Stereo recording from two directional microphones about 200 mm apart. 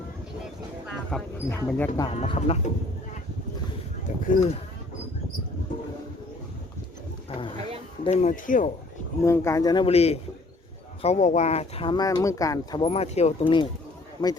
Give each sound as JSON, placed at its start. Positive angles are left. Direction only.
{"t": 1.1, "sound": "speech", "side_deg": 5}
{"t": 2.0, "sound": "speech", "side_deg": 25}
{"t": 4.2, "sound": "speech", "side_deg": 35}
{"t": 7.3, "sound": "speech", "side_deg": 25}
{"t": 8.0, "sound": "speech", "side_deg": 35}
{"t": 9.2, "sound": "speech", "side_deg": 15}